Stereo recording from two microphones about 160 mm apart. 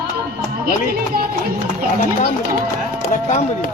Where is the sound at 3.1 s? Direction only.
50° left (ahead or behind).